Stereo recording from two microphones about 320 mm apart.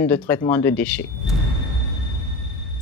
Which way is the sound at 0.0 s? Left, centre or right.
Centre.